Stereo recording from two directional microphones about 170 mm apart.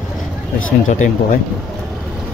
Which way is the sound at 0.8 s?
45° left (ahead or behind).